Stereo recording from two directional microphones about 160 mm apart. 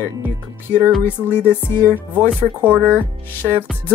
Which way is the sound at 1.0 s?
15° left (ahead or behind).